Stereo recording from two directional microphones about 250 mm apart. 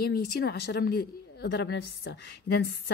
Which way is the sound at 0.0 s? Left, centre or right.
Left.